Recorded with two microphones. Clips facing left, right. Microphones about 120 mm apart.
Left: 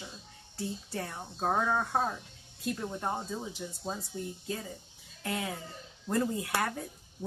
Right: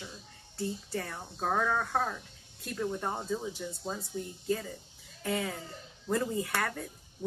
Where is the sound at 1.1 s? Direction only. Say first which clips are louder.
Left 2 dB; 20° left (ahead or behind).